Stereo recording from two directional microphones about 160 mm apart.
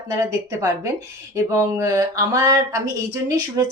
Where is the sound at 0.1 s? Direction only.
20° right (ahead or behind).